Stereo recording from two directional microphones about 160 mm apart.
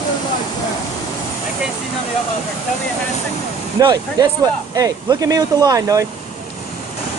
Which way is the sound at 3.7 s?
25° right (ahead or behind).